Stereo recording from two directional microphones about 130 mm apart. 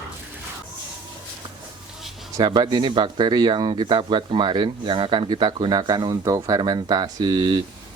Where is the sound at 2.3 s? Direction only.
35° right (ahead or behind).